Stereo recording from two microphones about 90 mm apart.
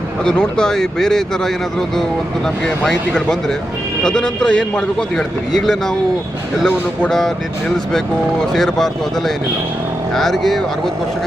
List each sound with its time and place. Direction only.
0.3 s speech: 10° left (ahead or behind)
2.6 s speech: 5° left (ahead or behind)
7.1 s speech: 5° left (ahead or behind)
8.5 s speech: 5° left (ahead or behind)